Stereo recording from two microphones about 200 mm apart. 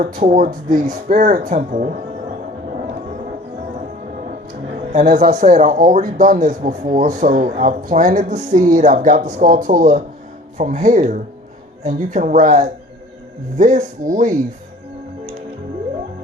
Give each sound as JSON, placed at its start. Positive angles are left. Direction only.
{"t": 0.0, "sound": "speech", "side_deg": -40}
{"t": 4.9, "sound": "speech", "side_deg": -35}